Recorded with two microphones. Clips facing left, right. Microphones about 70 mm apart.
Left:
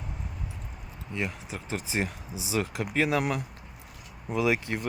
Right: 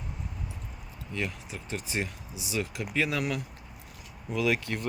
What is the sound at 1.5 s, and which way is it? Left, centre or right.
Speech, left.